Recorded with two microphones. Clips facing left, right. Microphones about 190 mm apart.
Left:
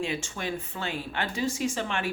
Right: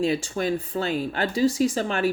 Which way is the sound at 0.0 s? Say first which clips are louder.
Right 8 dB; 40° right (ahead or behind).